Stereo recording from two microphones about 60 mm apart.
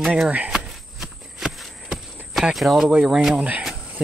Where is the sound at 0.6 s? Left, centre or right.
Centre.